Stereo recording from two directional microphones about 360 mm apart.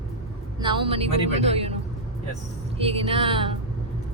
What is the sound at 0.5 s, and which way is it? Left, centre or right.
Speech, centre.